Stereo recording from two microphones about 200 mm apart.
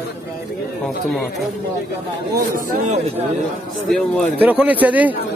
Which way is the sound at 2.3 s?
45° right (ahead or behind).